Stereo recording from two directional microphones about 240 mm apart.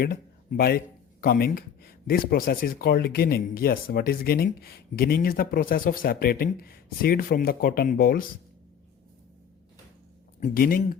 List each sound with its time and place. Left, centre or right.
0.0 s speech: left
10.4 s speech: left